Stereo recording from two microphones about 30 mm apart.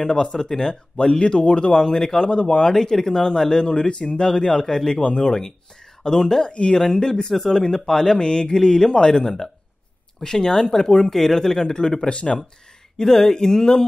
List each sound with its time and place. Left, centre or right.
0.0 s speech: left
1.2 s speech: left
1.8 s speech: centre
5.0 s speech: left
6.5 s speech: left
6.8 s speech: centre
8.2 s speech: left
8.5 s speech: centre
12.1 s speech: left
12.9 s speech: centre